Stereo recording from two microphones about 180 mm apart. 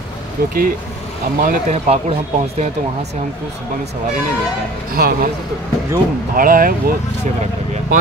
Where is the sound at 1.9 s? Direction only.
35° right (ahead or behind).